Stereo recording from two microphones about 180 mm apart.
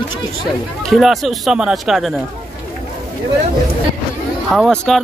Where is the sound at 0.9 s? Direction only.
Centre (ahead or behind).